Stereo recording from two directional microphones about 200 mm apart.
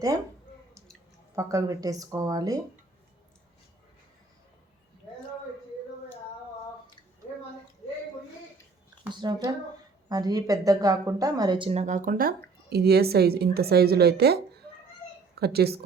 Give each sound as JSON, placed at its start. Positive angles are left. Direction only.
{"t": 1.4, "sound": "speech", "side_deg": -15}
{"t": 9.0, "sound": "a woman's voice", "side_deg": -20}